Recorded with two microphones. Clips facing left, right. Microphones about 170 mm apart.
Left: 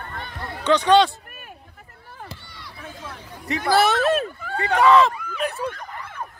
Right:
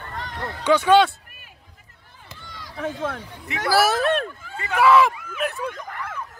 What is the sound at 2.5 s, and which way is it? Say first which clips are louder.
Run: right 10 dB; 90° right.